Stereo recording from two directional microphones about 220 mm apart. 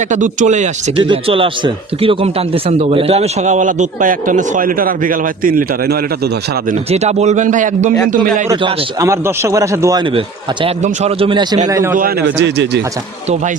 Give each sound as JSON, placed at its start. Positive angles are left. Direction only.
{"t": 0.1, "sound": "speech", "side_deg": -35}
{"t": 8.4, "sound": "a man's voice", "side_deg": -15}
{"t": 11.9, "sound": "a man's voice", "side_deg": -45}